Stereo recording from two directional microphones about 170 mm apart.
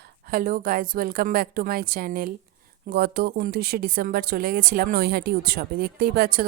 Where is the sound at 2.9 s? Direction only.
65° right (ahead or behind).